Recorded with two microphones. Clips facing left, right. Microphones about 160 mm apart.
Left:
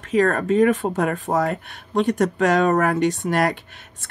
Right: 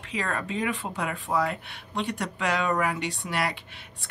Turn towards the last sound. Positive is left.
turn(degrees=45)  # may be behind; listen again after turning